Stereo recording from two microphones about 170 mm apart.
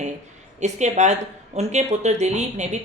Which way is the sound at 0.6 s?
45° right (ahead or behind).